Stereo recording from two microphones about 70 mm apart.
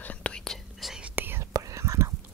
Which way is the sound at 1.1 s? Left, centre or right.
Right.